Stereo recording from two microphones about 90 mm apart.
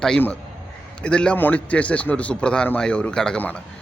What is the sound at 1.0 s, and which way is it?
Speech, 10° left (ahead or behind).